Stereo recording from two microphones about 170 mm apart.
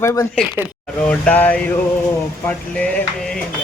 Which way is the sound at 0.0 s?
15° left (ahead or behind).